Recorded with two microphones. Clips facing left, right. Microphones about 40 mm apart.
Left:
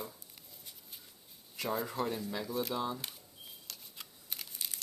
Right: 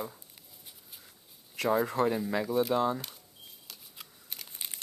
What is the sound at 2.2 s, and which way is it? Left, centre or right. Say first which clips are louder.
Speech: right 8 dB; right.